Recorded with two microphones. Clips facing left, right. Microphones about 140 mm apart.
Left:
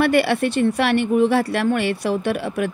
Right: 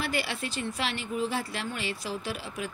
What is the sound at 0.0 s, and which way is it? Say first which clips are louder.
Speech: left 15 dB; 65° left (ahead or behind).